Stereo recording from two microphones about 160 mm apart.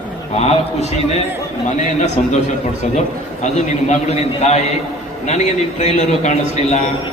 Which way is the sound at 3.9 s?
45° left (ahead or behind).